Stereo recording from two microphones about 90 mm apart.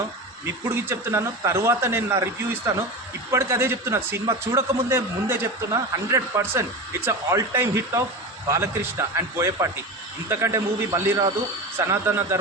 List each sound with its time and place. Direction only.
0.4 s a man's voice: 35° right (ahead or behind)